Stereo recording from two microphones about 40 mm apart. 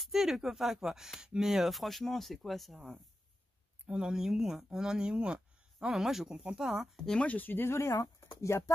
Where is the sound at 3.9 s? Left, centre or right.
Centre.